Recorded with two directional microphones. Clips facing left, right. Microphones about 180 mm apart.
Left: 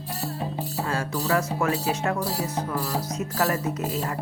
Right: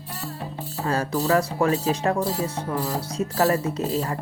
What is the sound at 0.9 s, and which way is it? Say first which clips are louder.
Speech: right 5 dB; 40° right (ahead or behind).